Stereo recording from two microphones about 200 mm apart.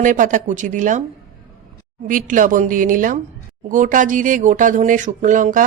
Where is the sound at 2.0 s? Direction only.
40° right (ahead or behind).